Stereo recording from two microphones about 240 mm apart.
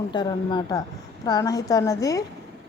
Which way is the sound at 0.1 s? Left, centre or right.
Centre.